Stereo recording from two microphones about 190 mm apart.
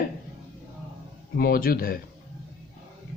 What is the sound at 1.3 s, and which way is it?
Speech, 50° left (ahead or behind).